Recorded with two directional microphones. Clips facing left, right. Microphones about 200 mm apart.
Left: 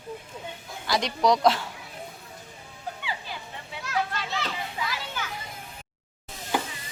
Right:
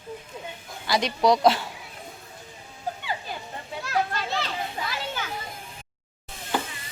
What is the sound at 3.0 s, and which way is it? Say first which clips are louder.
Children playing: right 3 dB; 45° right (ahead or behind).